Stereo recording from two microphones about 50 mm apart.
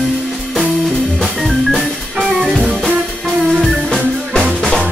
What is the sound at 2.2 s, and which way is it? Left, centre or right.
Music, centre.